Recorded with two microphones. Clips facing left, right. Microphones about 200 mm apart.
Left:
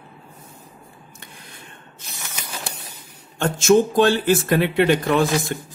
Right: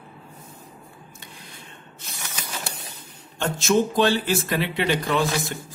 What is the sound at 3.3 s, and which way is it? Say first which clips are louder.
Speech: left 5 dB; 50° left (ahead or behind).